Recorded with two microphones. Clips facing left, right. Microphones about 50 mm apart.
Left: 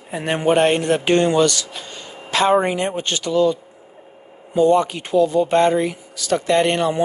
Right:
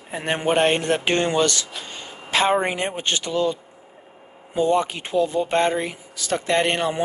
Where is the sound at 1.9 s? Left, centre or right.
Right.